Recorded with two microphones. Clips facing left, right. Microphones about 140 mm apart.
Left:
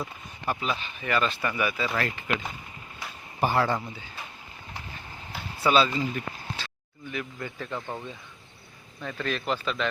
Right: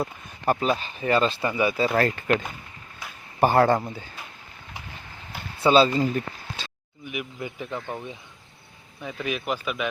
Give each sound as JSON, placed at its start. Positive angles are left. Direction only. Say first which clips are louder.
{"t": 0.0, "sound": "speech", "louder": "right 6 dB", "side_deg": -45}
{"t": 1.8, "sound": "speech", "louder": "right 7 dB", "side_deg": -40}
{"t": 3.4, "sound": "speech", "louder": "right 6 dB", "side_deg": -50}
{"t": 5.6, "sound": "speech", "louder": "right 5 dB", "side_deg": -30}
{"t": 6.6, "sound": "speech", "louder": "right 1 dB", "side_deg": -15}